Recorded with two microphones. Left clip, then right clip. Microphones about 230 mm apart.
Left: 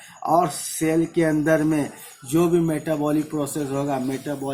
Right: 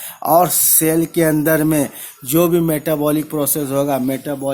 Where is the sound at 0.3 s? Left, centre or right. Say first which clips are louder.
Right 7 dB; right.